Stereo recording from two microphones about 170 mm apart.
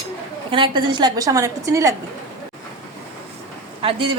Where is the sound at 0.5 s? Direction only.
30° right (ahead or behind).